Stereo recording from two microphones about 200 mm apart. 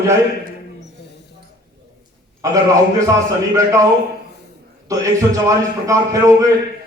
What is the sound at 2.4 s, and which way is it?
Speech, 15° right (ahead or behind).